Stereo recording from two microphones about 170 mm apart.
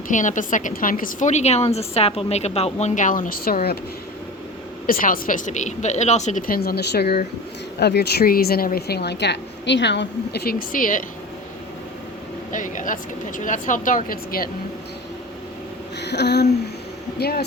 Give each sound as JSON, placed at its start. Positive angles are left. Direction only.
{"t": 0.1, "sound": "a woman's voice", "side_deg": 50}
{"t": 4.9, "sound": "a woman's voice", "side_deg": 55}
{"t": 12.5, "sound": "a woman's voice", "side_deg": 50}
{"t": 16.0, "sound": "a sound", "side_deg": 80}
{"t": 17.2, "sound": "a woman's voice", "side_deg": 65}